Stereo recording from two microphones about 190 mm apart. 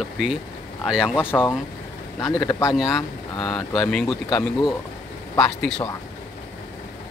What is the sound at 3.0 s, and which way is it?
Speech, 25° left (ahead or behind).